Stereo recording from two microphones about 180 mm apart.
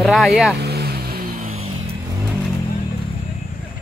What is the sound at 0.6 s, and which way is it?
Vehicle, 65° right (ahead or behind).